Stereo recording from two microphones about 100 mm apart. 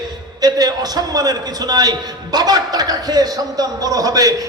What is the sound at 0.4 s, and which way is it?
A man's voice, 40° right (ahead or behind).